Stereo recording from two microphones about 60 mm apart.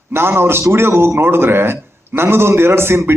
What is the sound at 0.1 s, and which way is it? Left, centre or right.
A man's voice, right.